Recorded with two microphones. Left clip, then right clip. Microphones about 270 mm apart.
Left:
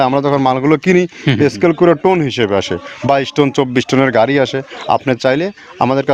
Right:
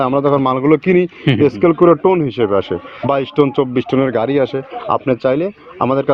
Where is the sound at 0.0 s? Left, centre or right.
Left.